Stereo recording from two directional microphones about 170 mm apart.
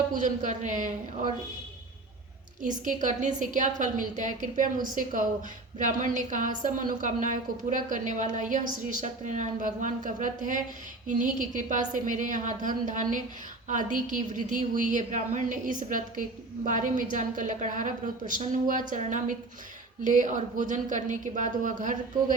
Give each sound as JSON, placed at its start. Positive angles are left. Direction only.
{"t": 0.1, "sound": "a woman's voice", "side_deg": -50}
{"t": 2.6, "sound": "a woman's voice", "side_deg": -50}
{"t": 5.8, "sound": "a woman's voice", "side_deg": -50}